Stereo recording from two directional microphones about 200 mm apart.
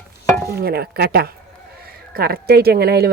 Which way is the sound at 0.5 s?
50° right (ahead or behind).